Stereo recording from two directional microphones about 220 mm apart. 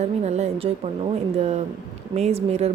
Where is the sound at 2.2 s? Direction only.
30° right (ahead or behind).